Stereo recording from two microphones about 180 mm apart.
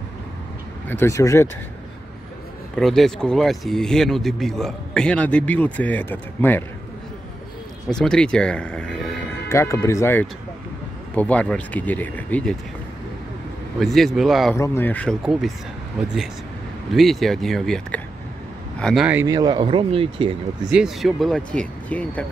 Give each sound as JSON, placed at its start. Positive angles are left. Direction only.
{"t": 0.8, "sound": "speech", "side_deg": 15}
{"t": 2.7, "sound": "speech", "side_deg": 0}
{"t": 7.9, "sound": "speech", "side_deg": 5}
{"t": 9.5, "sound": "speech", "side_deg": 15}
{"t": 13.7, "sound": "speech", "side_deg": 0}
{"t": 14.6, "sound": "speech", "side_deg": 10}
{"t": 19.2, "sound": "speech", "side_deg": -20}
{"t": 20.7, "sound": "speech", "side_deg": 0}